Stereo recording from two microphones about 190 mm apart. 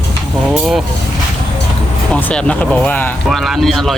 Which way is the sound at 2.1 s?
5° left (ahead or behind).